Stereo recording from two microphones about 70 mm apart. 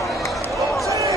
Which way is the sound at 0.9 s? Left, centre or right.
Right.